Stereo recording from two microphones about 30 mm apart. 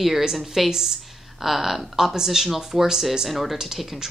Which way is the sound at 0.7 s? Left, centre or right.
Centre.